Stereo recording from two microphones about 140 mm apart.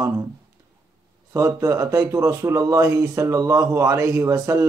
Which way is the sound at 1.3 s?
20° right (ahead or behind).